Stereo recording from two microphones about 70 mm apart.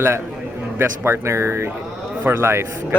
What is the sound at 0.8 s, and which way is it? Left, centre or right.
Speech, right.